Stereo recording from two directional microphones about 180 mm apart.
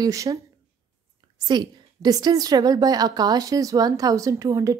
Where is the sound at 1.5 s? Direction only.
25° right (ahead or behind).